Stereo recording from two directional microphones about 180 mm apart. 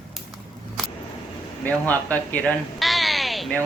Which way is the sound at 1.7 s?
10° left (ahead or behind).